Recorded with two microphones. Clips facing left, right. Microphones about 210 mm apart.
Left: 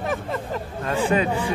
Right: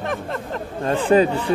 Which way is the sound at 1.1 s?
30° right (ahead or behind).